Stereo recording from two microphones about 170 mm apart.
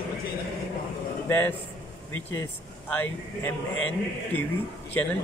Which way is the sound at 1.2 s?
10° left (ahead or behind).